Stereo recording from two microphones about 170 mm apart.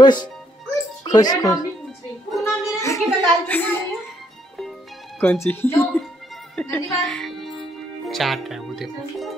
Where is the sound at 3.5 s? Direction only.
10° left (ahead or behind).